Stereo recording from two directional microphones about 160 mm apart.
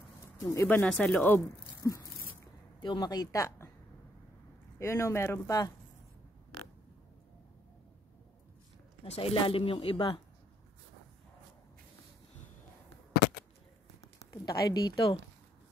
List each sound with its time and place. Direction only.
0.5 s speech: 15° left (ahead or behind)
1.8 s a sound: 20° left (ahead or behind)
2.8 s speech: 30° left (ahead or behind)
4.7 s speech: 20° left (ahead or behind)
9.0 s speech: 40° left (ahead or behind)
14.2 s speech: 20° left (ahead or behind)